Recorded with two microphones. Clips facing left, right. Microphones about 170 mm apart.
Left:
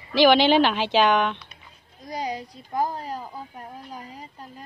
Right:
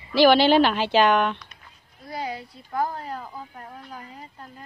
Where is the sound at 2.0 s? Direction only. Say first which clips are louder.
Left 2 dB; 15° left (ahead or behind).